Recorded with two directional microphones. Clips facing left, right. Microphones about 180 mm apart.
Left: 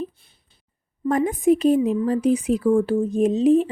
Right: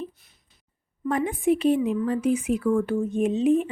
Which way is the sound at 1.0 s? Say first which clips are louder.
Left 4 dB; 40° left (ahead or behind).